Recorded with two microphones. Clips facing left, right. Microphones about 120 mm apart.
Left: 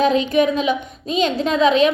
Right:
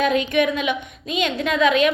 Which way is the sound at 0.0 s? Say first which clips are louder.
Left 3 dB; 30° left (ahead or behind).